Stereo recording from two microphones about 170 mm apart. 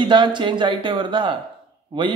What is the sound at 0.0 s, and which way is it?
Speech, 25° right (ahead or behind).